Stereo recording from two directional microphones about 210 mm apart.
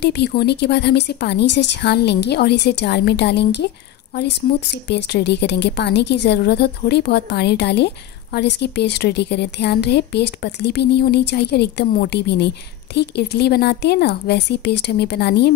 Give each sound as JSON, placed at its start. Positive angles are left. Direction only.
{"t": 0.0, "sound": "a woman's voice", "side_deg": 50}